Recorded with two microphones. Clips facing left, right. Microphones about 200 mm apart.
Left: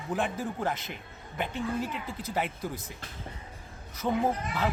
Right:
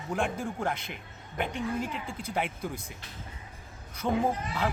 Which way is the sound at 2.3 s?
Centre (ahead or behind).